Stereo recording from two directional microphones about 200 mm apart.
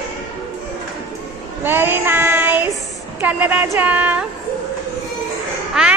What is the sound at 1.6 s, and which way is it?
Child singing, 10° right (ahead or behind).